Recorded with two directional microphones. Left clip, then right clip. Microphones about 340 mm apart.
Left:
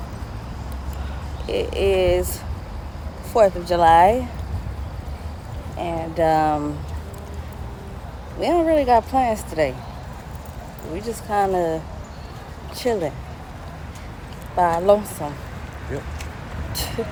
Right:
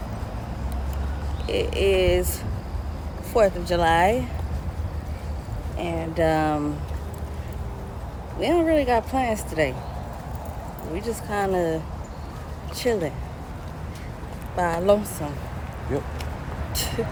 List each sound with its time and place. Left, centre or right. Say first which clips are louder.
1.5 s speech: left 2 dB; centre
3.3 s speech: left 4 dB; centre
5.7 s speech: left 2 dB; centre
8.4 s speech: left 3 dB; centre
10.9 s speech: left 5 dB; centre
14.5 s speech: left 4 dB; centre
15.9 s speech: right 3 dB; centre
16.7 s a sound: even; centre